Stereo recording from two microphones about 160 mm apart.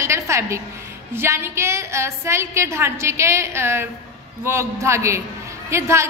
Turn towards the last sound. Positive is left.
turn(degrees=-15)  # may be behind; listen again after turning